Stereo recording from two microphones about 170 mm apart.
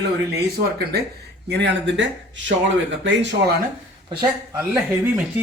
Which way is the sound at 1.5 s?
90° right.